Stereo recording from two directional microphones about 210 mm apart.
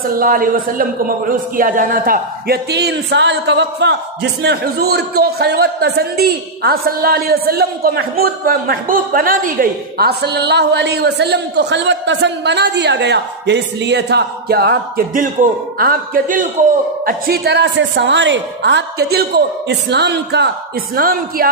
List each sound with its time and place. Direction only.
0.0 s a man's voice: 40° right (ahead or behind)